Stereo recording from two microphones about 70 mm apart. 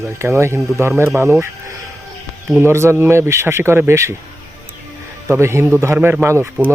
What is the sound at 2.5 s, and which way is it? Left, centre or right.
Speech, right.